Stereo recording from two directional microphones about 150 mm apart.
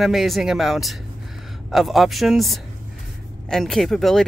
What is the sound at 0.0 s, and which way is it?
Speech, centre (ahead or behind).